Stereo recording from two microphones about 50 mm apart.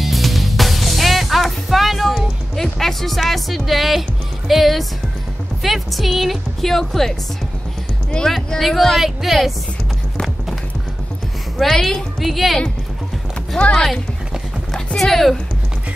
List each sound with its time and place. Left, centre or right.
0.0 s music: centre
4.5 s speech: centre
8.3 s speech: centre
11.5 s speech: centre
13.6 s speech: left
15.0 s speech: centre